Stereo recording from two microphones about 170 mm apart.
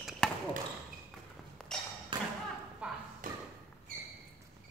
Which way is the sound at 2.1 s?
25° right (ahead or behind).